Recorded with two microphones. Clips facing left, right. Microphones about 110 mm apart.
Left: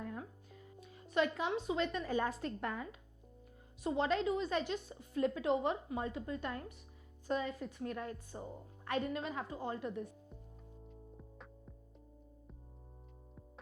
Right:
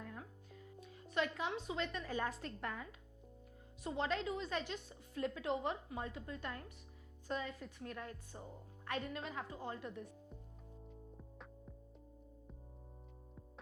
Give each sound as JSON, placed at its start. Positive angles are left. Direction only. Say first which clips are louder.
{"t": 0.0, "sound": "music", "louder": "left 6 dB", "side_deg": 25}
{"t": 0.8, "sound": "a woman's voice", "louder": "left 5 dB", "side_deg": 15}
{"t": 11.2, "sound": "music", "louder": "even", "side_deg": 0}